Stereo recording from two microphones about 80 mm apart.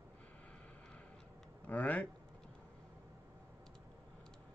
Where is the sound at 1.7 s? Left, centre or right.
Centre.